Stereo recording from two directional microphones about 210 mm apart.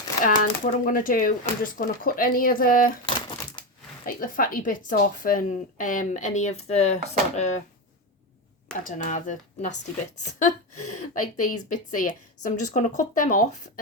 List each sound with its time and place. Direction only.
0.3 s a woman's voice: 40° left (ahead or behind)
3.2 s crumpling: 20° left (ahead or behind)
4.0 s a woman's voice: 40° left (ahead or behind)
8.8 s a woman's voice: 35° left (ahead or behind)
11.1 s a woman's voice: 40° left (ahead or behind)